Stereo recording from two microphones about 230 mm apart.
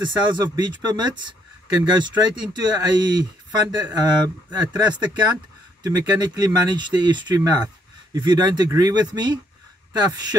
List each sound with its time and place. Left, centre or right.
0.0 s speech: centre